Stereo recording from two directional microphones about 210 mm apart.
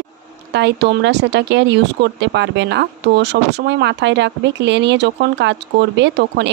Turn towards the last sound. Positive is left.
turn(degrees=-55)  # may be behind; listen again after turning